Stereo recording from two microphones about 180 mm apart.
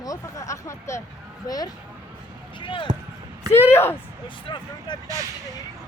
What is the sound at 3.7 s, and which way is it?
Speech, 15° left (ahead or behind).